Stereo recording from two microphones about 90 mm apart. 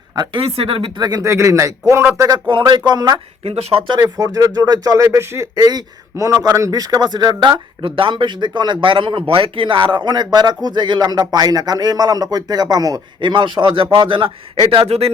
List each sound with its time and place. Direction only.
0.2 s speech: 80° right
0.9 s speech: 45° right (ahead or behind)
2.5 s speech: 60° right (ahead or behind)
3.7 s speech: 90° right
4.2 s speech: 40° right (ahead or behind)
5.6 s speech: 45° right (ahead or behind)
7.8 s speech: 70° right (ahead or behind); by 13.0 s 45° right (ahead or behind)
13.2 s a man's voice: 60° right (ahead or behind); by 15.1 s 90° right